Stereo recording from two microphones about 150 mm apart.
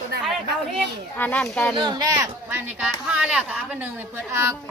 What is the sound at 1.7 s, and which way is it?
Speech, 30° right (ahead or behind).